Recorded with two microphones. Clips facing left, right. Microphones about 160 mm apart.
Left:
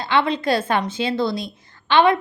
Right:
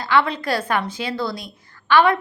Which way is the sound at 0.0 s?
20° left (ahead or behind).